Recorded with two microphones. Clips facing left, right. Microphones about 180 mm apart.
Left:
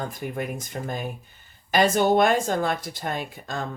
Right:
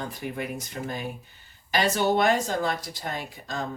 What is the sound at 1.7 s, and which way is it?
Speech, 50° left (ahead or behind).